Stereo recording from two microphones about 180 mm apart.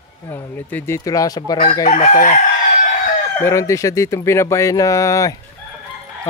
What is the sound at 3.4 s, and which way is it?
Speech, 15° left (ahead or behind).